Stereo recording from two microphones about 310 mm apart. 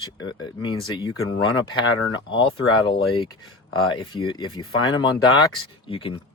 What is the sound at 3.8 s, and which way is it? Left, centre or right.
Speech, centre.